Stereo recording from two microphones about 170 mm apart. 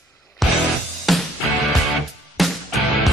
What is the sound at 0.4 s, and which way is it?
Music, centre (ahead or behind).